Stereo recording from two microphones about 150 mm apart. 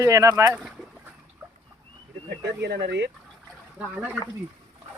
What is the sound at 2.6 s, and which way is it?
Speech, 90° right.